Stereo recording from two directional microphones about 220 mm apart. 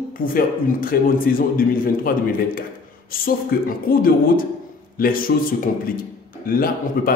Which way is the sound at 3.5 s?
40° left (ahead or behind).